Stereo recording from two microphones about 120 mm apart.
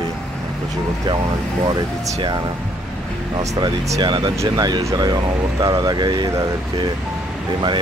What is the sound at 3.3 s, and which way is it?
Speech, 35° right (ahead or behind).